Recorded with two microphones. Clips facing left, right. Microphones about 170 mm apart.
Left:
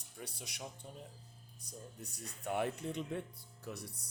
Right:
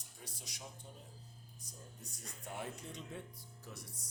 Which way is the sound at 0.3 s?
65° left (ahead or behind).